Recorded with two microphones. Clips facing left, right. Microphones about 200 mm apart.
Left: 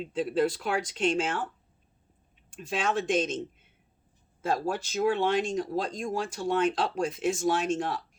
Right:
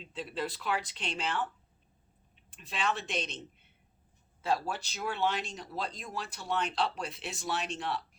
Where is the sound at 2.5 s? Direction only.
45° left (ahead or behind).